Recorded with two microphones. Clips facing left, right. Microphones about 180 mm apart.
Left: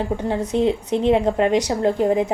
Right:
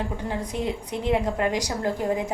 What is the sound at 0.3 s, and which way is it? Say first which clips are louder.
A woman's voice: left 10 dB; 25° left (ahead or behind).